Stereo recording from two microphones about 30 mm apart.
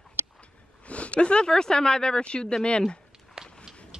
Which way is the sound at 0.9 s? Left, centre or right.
Left.